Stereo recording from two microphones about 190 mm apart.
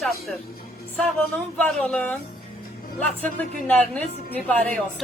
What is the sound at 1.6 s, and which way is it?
A man's voice, 5° left (ahead or behind).